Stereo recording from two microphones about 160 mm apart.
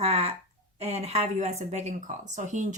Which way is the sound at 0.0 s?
40° right (ahead or behind).